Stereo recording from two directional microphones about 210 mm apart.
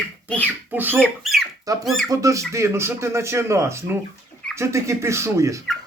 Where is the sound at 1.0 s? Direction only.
Centre (ahead or behind).